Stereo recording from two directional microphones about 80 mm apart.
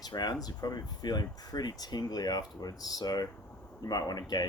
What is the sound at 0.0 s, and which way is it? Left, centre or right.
Speech, left.